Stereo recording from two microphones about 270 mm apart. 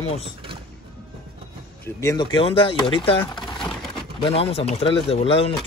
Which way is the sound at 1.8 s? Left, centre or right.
Centre.